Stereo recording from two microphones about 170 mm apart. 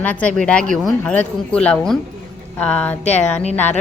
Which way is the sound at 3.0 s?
40° left (ahead or behind).